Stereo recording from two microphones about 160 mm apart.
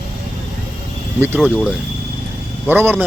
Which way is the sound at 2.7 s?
10° right (ahead or behind).